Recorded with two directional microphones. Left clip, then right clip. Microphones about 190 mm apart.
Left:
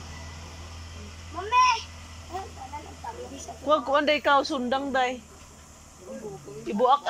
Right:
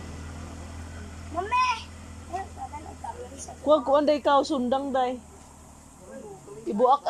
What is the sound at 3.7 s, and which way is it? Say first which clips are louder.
A woman's voice: right 2 dB; 20° right (ahead or behind).